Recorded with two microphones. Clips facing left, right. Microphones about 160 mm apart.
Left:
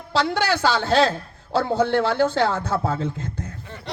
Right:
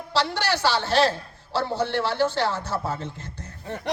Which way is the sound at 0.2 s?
50° left (ahead or behind).